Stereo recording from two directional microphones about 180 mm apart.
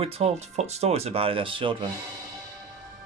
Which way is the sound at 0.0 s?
35° right (ahead or behind).